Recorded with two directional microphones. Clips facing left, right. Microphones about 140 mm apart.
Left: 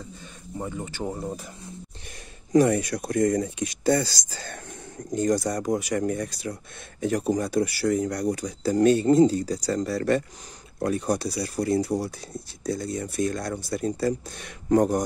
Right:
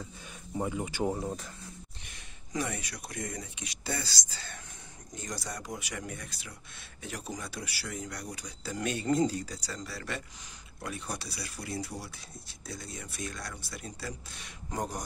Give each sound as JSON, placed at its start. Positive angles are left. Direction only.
{"t": 0.6, "sound": "speech", "side_deg": -5}
{"t": 1.1, "sound": "speech", "side_deg": 0}
{"t": 2.5, "sound": "speech", "side_deg": 45}
{"t": 9.6, "sound": "speech", "side_deg": 45}